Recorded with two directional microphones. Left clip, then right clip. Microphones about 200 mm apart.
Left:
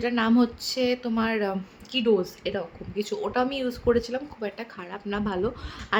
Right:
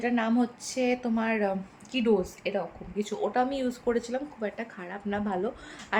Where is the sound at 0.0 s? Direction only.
20° left (ahead or behind).